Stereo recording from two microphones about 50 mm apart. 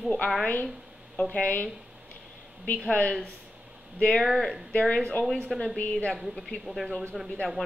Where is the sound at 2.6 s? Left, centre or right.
Left.